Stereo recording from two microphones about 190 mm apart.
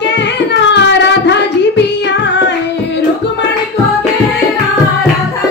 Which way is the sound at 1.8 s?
65° left (ahead or behind).